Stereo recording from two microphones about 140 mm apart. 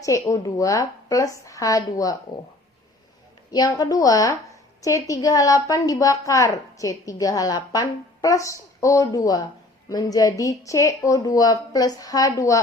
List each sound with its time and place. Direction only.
0.0 s a woman's voice: 25° left (ahead or behind)
3.5 s a woman's voice: 25° left (ahead or behind)